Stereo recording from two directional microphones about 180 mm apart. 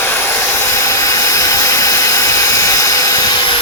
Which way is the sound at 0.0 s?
10° left (ahead or behind).